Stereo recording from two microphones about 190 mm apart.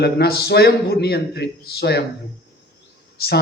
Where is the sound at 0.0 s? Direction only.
55° left (ahead or behind).